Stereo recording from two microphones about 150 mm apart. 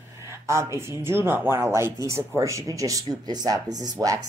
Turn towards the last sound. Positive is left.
turn(degrees=-20)  # may be behind; listen again after turning